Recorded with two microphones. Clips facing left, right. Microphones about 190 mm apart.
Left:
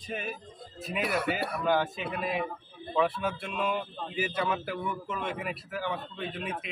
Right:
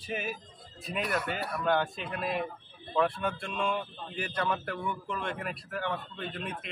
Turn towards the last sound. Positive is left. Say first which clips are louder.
# left 2 dB
turn(degrees=0)  # may be behind; listen again after turning